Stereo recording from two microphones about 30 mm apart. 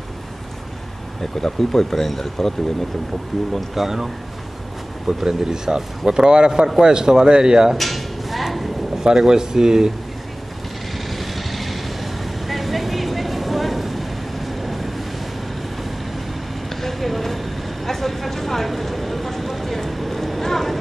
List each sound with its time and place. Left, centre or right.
1.2 s speech: centre
3.3 s speech: centre
3.7 s a man's voice: centre; by 7.7 s right
7.7 s a sound: centre
9.0 s speech: right
11.1 s vehicle: centre
16.6 s vehicle: centre
17.8 s a sound: centre